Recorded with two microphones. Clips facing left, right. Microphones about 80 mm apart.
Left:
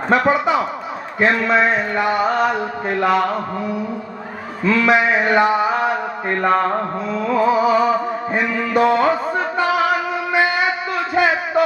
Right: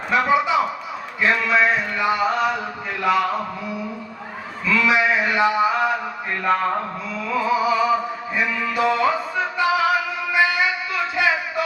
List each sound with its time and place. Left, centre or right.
0.1 s a man's voice: left
4.6 s mantra: left